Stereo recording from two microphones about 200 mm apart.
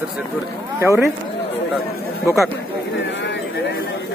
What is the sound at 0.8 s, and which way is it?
Speech, 15° right (ahead or behind).